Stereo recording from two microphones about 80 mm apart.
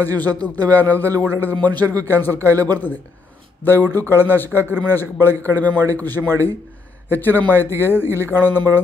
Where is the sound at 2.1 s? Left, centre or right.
Left.